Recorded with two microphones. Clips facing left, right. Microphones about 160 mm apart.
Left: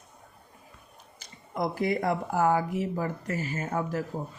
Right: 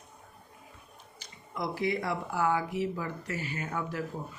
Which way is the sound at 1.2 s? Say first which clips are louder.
Left 5 dB; 50° left (ahead or behind).